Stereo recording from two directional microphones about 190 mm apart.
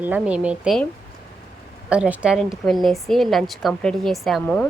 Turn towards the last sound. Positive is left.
turn(degrees=5)  # may be behind; listen again after turning